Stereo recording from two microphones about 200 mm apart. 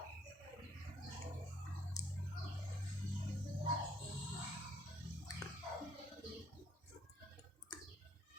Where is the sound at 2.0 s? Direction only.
20° left (ahead or behind).